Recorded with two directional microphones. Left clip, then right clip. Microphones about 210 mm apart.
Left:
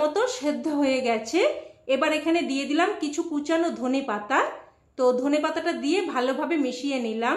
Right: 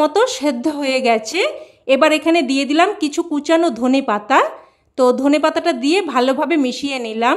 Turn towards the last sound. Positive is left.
turn(degrees=-55)  # may be behind; listen again after turning